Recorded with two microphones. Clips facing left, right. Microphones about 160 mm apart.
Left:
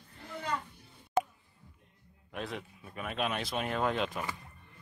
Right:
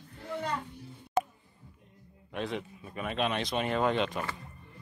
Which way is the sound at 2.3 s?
Centre (ahead or behind).